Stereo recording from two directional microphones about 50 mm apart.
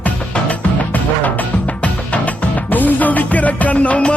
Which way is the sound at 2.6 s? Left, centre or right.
Left.